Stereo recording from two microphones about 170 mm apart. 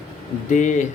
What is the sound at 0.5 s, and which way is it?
Speech, 45° left (ahead or behind).